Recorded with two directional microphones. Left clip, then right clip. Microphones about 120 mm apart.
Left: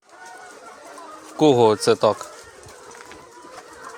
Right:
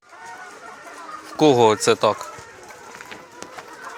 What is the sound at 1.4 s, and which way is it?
Speech, 25° left (ahead or behind).